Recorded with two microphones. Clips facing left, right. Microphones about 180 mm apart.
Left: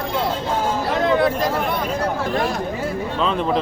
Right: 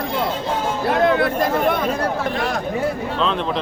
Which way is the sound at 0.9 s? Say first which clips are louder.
Right 2 dB; 55° right (ahead or behind).